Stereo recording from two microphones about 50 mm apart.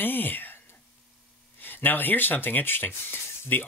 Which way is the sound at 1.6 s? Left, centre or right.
Left.